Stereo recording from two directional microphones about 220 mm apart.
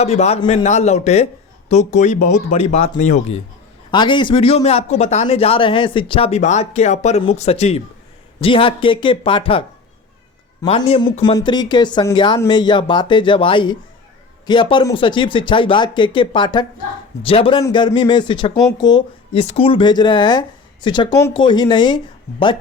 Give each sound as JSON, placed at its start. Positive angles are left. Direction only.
{"t": 0.0, "sound": "speech", "side_deg": 30}
{"t": 10.7, "sound": "speech", "side_deg": 30}